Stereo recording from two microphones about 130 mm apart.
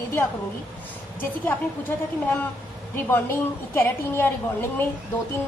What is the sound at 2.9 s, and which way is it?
A woman's voice, 15° left (ahead or behind).